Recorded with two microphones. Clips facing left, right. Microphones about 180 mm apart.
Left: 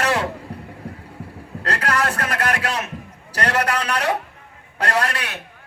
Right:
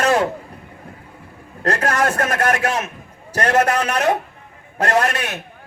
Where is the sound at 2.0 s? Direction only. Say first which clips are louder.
Right 4 dB; 25° right (ahead or behind).